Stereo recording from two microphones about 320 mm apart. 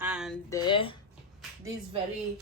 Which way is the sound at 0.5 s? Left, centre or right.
Centre.